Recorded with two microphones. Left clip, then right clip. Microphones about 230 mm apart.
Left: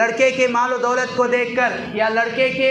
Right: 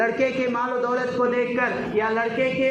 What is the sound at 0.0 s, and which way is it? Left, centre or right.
A man's voice, left.